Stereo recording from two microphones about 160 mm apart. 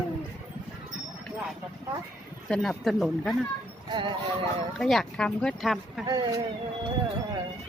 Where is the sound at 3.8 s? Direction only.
30° right (ahead or behind).